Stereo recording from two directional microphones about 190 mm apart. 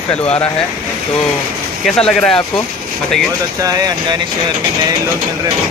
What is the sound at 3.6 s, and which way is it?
Speech, 20° right (ahead or behind).